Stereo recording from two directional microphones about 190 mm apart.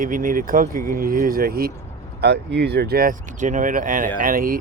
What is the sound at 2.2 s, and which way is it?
Speech, 65° right (ahead or behind).